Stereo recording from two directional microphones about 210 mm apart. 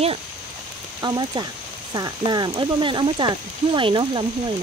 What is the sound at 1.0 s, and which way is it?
Speech, 20° right (ahead or behind).